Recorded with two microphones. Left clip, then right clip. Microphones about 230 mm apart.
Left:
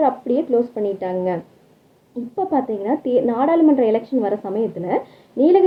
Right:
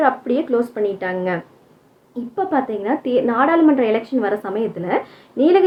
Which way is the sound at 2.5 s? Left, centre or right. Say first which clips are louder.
Even; centre.